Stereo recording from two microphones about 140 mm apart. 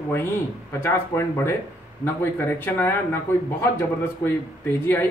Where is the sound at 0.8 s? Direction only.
20° left (ahead or behind).